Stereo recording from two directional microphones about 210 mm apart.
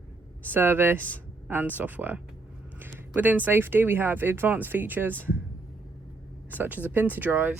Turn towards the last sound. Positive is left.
turn(degrees=-10)  # may be behind; listen again after turning